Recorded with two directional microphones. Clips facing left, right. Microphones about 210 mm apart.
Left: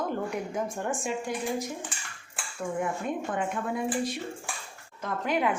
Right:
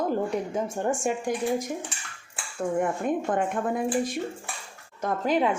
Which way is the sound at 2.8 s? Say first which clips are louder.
Right 4 dB; 50° right (ahead or behind).